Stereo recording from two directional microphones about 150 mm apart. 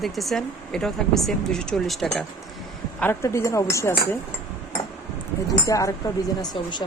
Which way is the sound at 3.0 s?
20° left (ahead or behind).